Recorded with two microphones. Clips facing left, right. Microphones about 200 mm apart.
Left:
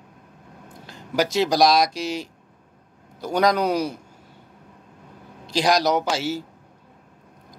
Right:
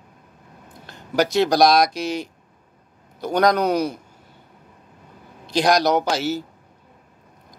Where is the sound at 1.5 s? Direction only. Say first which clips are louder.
Right 2 dB; 60° right (ahead or behind).